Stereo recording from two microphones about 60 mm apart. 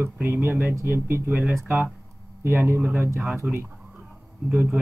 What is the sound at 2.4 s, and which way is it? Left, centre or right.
Speech, right.